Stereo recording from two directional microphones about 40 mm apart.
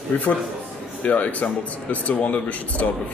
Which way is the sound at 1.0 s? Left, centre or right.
Left.